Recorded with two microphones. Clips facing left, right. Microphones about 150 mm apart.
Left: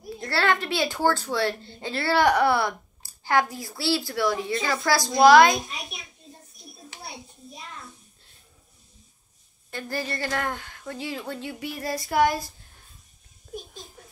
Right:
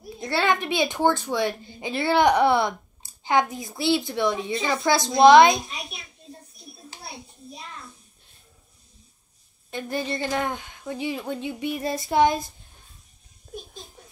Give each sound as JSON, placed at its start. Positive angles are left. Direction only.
{"t": 0.2, "sound": "a woman's voice", "side_deg": -20}
{"t": 5.7, "sound": "a child's voice", "side_deg": 0}
{"t": 9.7, "sound": "a woman's voice", "side_deg": -20}